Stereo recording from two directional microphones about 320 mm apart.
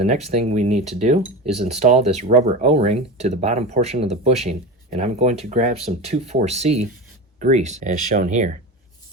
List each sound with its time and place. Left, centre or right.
0.0 s speech: centre